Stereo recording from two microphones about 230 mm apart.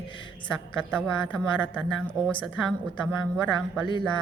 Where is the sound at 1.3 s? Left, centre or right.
Centre.